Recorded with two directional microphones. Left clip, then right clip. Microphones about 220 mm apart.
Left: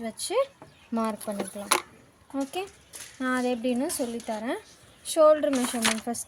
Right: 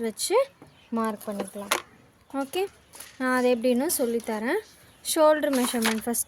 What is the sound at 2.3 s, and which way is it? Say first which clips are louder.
Speech: right 3 dB; 40° right (ahead or behind).